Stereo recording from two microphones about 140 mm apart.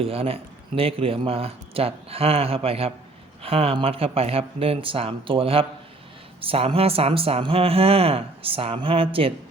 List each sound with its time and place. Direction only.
0.0 s speech: 45° right (ahead or behind)